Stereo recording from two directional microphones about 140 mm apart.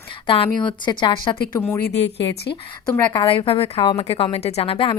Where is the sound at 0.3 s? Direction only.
35° left (ahead or behind).